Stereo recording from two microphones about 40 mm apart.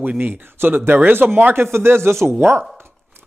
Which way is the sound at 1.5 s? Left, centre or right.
Right.